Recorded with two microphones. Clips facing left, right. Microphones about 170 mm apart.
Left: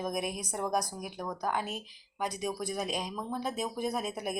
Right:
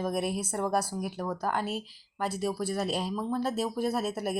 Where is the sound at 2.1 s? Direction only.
15° left (ahead or behind).